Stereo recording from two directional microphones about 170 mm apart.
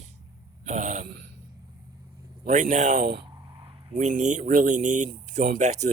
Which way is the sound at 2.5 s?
45° right (ahead or behind).